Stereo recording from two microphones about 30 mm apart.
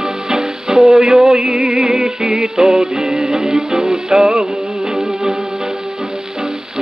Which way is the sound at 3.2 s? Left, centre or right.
Right.